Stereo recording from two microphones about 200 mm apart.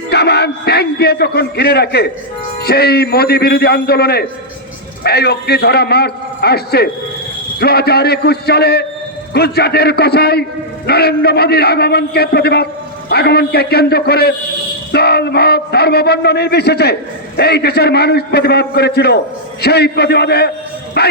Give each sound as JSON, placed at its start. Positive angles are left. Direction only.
{"t": 0.1, "sound": "a man's voice", "side_deg": 55}